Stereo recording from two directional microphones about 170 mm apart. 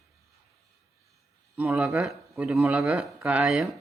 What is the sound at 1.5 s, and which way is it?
Speech, 5° right (ahead or behind).